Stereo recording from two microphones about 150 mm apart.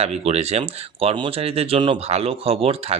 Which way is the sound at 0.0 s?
45° right (ahead or behind).